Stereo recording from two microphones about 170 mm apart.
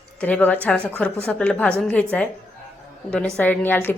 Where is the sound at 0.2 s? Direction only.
10° left (ahead or behind).